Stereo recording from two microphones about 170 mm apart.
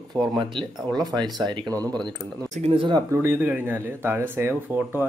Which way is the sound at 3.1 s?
15° right (ahead or behind).